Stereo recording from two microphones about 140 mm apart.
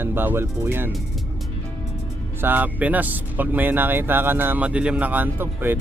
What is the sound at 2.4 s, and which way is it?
Speech, 10° right (ahead or behind).